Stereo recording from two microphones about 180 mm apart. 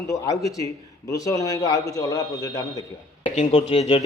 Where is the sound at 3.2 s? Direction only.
35° left (ahead or behind).